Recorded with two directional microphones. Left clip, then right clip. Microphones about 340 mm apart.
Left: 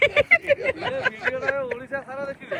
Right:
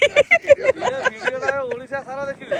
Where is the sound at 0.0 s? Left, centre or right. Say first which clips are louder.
Right 3 dB; centre.